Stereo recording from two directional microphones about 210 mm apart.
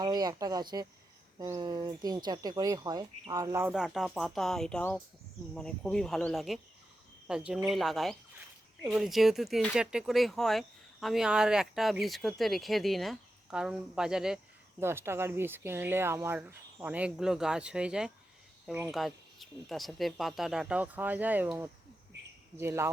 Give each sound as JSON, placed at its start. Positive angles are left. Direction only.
{"t": 0.0, "sound": "speech", "side_deg": -20}
{"t": 3.7, "sound": "speech", "side_deg": -5}